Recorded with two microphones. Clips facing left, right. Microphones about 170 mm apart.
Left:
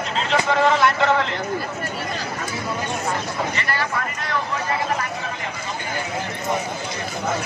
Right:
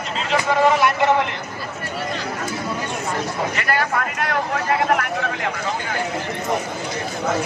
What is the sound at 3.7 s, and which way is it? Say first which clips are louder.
Vehicle: right 4 dB; 55° right (ahead or behind).